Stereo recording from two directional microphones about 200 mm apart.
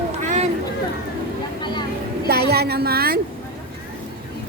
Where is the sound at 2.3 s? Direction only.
50° right (ahead or behind).